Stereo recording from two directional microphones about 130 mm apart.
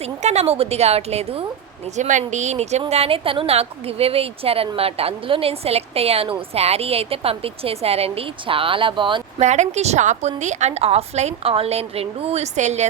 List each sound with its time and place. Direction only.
0.0 s a woman's voice: 60° right (ahead or behind)
2.0 s a woman's voice: 70° right (ahead or behind)
2.9 s a woman's voice: 50° right (ahead or behind)
9.4 s a woman's voice: 60° right (ahead or behind)